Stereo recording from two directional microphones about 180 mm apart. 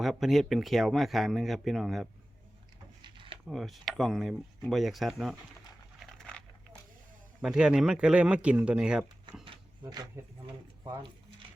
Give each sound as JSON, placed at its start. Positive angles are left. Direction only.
{"t": 0.0, "sound": "speech", "side_deg": 0}
{"t": 3.0, "sound": "a sound", "side_deg": -25}
{"t": 3.4, "sound": "speech", "side_deg": 0}
{"t": 6.1, "sound": "a sound", "side_deg": 5}
{"t": 7.4, "sound": "speech", "side_deg": -5}
{"t": 9.4, "sound": "speech", "side_deg": -25}